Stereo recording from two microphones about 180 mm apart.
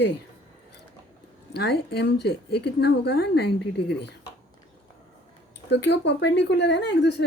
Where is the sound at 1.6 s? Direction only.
65° left (ahead or behind).